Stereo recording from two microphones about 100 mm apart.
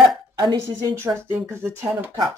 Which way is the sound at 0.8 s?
25° right (ahead or behind).